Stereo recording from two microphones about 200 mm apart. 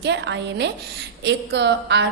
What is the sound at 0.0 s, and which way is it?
A woman's voice, 60° right (ahead or behind).